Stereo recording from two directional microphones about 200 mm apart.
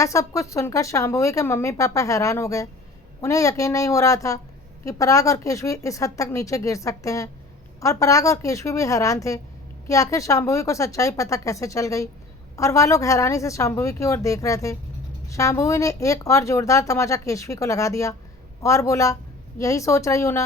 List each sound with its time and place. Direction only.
0.0 s speech: 15° left (ahead or behind)